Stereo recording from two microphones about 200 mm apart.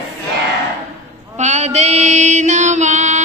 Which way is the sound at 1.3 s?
35° right (ahead or behind).